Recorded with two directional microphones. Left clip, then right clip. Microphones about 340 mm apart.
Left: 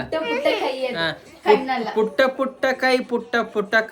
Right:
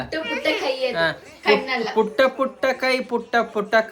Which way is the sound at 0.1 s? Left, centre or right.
Centre.